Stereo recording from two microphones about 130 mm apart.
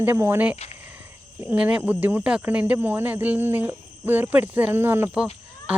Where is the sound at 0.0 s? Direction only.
15° right (ahead or behind).